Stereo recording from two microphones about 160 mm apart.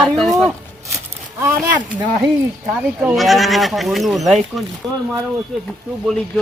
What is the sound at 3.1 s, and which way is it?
Speech, centre (ahead or behind).